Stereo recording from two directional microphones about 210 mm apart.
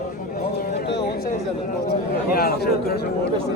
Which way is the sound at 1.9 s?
45° left (ahead or behind).